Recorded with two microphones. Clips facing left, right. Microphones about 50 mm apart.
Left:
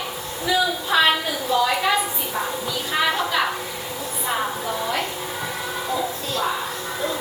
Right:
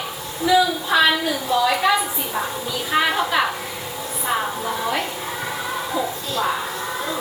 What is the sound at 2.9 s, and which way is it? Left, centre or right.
Speech, centre.